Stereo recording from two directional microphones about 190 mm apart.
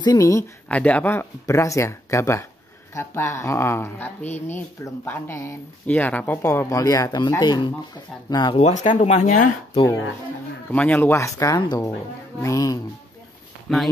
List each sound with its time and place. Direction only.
0.0 s speech: 20° left (ahead or behind)
8.5 s speech: 40° left (ahead or behind)
10.7 s speech: 10° left (ahead or behind)
13.7 s speech: centre (ahead or behind)